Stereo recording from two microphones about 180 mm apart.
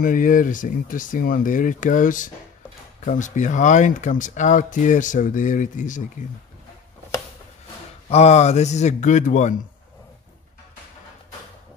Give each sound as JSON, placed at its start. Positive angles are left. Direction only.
{"t": 0.0, "sound": "speech", "side_deg": 50}
{"t": 8.1, "sound": "a man's voice", "side_deg": 35}